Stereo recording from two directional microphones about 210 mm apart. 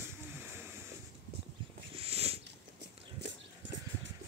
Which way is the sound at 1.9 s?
30° right (ahead or behind).